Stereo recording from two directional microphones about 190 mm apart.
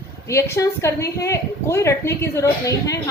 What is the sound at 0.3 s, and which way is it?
A woman's voice, 15° left (ahead or behind).